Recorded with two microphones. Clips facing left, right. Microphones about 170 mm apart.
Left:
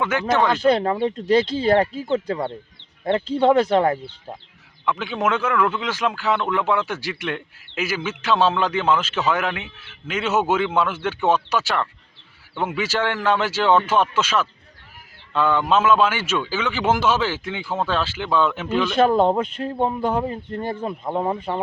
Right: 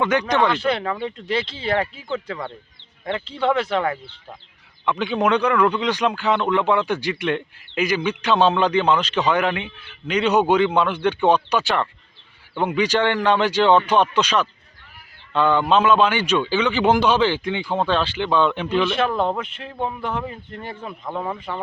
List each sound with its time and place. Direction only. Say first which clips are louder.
0.0 s a man's voice: right 1 dB; 5° left (ahead or behind)
0.4 s speech: left 3 dB; 40° left (ahead or behind)
4.9 s a man's voice: right 3 dB; centre (ahead or behind)
18.9 s speech: left 5 dB; 35° left (ahead or behind)